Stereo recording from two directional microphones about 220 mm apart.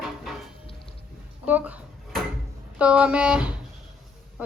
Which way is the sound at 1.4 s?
5° right (ahead or behind).